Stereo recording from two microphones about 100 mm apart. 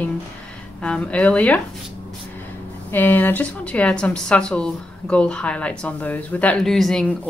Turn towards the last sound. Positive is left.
turn(degrees=10)  # may be behind; listen again after turning